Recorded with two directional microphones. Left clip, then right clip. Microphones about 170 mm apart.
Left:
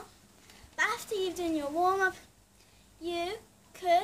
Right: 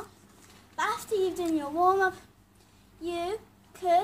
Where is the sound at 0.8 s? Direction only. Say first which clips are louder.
Right 4 dB; 25° left (ahead or behind).